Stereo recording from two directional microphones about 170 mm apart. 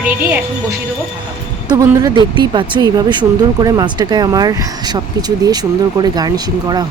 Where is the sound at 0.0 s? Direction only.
10° right (ahead or behind).